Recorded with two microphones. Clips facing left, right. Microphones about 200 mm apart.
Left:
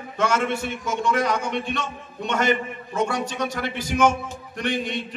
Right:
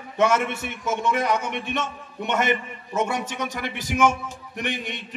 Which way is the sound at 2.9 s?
20° right (ahead or behind).